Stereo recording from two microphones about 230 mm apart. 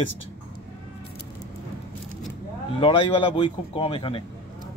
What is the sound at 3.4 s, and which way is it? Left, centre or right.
Speech, left.